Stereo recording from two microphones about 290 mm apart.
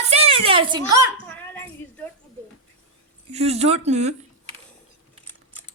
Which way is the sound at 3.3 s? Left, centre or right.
Right.